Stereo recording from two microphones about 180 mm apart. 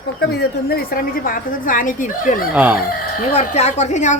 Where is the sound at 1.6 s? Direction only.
50° left (ahead or behind).